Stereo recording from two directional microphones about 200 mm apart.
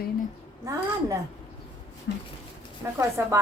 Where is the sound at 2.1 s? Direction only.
60° left (ahead or behind).